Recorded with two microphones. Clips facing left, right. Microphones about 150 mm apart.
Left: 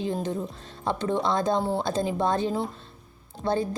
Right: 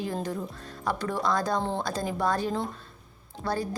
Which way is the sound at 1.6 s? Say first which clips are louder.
Left 3 dB; 10° left (ahead or behind).